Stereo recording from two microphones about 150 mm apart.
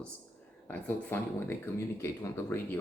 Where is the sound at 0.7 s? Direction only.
15° left (ahead or behind).